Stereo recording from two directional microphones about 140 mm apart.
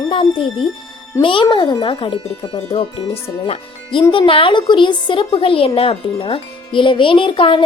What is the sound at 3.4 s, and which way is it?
A woman's voice, 40° left (ahead or behind).